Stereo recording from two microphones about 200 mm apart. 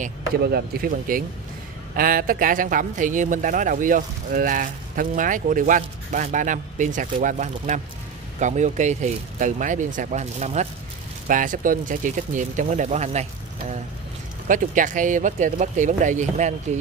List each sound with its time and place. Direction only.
0.0 s a man's voice: 50° right (ahead or behind)